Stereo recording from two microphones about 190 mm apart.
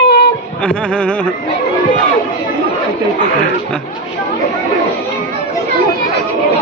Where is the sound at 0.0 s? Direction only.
60° left (ahead or behind).